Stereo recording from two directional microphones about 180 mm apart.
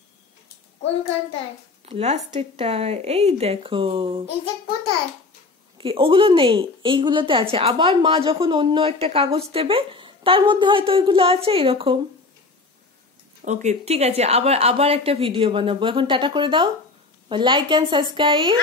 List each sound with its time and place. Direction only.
1.9 s a woman's voice: 35° right (ahead or behind)
5.8 s a woman's voice: 30° right (ahead or behind)
13.4 s a woman's voice: 40° right (ahead or behind); by 18.6 s 25° right (ahead or behind)